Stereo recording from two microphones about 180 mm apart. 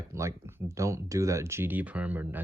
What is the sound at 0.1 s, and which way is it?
Speech, 15° right (ahead or behind).